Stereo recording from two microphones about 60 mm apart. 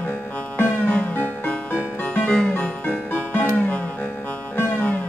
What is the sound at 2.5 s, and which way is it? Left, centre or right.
Music, left.